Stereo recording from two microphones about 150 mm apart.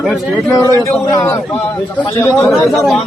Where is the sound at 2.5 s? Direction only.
Centre (ahead or behind).